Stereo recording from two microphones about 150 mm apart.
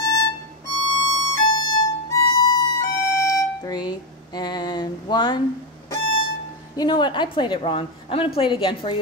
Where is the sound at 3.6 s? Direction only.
25° left (ahead or behind).